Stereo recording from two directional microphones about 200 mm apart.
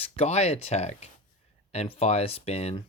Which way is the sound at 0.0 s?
30° left (ahead or behind).